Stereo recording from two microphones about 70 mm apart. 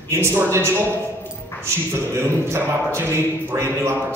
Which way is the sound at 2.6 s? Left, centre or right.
Right.